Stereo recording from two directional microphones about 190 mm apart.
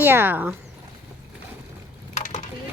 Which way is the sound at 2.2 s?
40° left (ahead or behind).